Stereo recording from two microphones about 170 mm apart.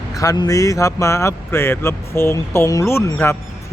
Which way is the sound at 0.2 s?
20° left (ahead or behind).